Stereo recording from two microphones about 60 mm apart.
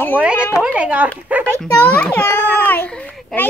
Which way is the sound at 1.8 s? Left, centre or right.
Left.